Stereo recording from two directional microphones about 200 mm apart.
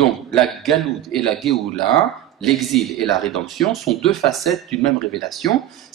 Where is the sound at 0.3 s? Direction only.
Centre (ahead or behind).